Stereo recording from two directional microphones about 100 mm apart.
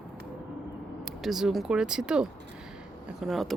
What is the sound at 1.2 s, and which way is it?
A woman's voice, 5° right (ahead or behind).